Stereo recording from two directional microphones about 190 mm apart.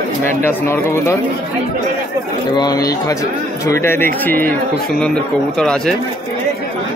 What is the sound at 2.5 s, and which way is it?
Speech, 20° left (ahead or behind).